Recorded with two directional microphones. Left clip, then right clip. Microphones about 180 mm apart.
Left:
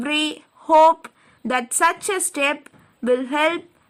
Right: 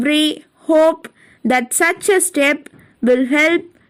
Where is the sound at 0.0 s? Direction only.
15° right (ahead or behind).